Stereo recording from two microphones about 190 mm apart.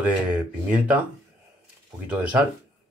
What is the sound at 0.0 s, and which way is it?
Speech, 5° right (ahead or behind).